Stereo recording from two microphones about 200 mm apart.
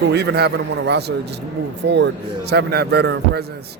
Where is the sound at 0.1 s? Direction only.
55° right (ahead or behind).